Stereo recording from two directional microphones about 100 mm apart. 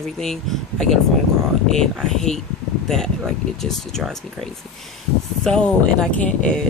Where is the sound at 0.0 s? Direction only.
5° left (ahead or behind).